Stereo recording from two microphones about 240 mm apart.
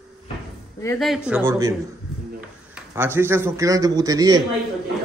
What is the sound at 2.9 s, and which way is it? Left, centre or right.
A man's voice, centre.